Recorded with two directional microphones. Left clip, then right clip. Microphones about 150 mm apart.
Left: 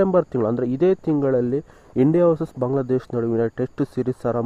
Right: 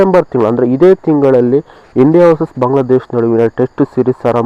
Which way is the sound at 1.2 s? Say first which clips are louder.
Right 12 dB; 30° left (ahead or behind).